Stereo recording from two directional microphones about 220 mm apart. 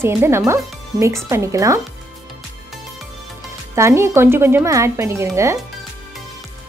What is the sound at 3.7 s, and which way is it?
Speech, 10° right (ahead or behind).